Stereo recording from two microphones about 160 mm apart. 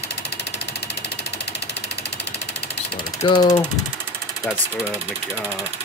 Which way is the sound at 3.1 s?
30° left (ahead or behind).